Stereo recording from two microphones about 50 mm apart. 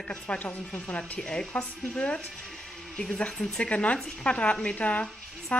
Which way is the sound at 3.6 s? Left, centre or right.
Left.